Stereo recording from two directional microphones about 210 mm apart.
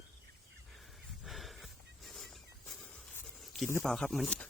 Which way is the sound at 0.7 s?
Centre (ahead or behind).